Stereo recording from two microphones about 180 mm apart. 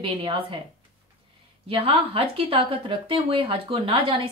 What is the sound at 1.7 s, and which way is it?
Speech, 30° right (ahead or behind).